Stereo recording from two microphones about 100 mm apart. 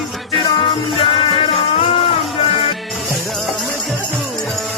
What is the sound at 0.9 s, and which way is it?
Music, 65° left (ahead or behind).